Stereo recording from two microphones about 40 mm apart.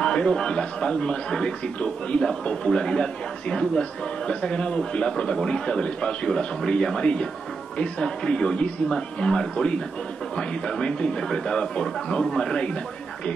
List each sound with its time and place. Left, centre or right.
0.0 s speech: left